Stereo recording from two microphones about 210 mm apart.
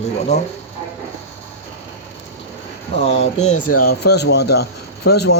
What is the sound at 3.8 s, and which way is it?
Speech, 50° left (ahead or behind).